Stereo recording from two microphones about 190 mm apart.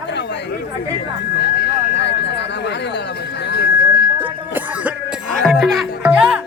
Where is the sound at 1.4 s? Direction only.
65° left (ahead or behind).